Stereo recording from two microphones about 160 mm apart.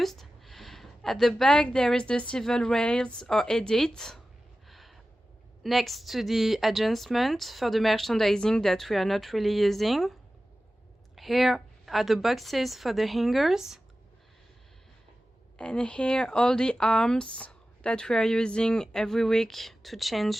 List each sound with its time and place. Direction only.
0.0 s a woman's voice: centre (ahead or behind)
4.7 s a sound: centre (ahead or behind)
5.6 s speech: centre (ahead or behind)
15.5 s speech: 5° left (ahead or behind)